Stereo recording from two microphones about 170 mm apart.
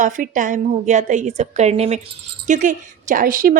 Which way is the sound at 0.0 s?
50° right (ahead or behind).